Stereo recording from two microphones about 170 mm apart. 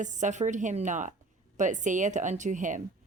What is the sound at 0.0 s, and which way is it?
A woman's voice, 45° right (ahead or behind).